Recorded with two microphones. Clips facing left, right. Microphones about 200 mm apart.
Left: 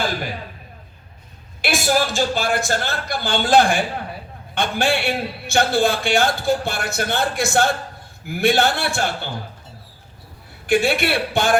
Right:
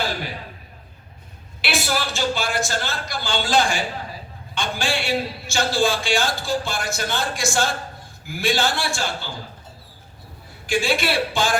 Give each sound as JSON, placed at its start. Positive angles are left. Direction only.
{"t": 1.6, "sound": "speech", "side_deg": 45}
{"t": 10.7, "sound": "speech", "side_deg": 60}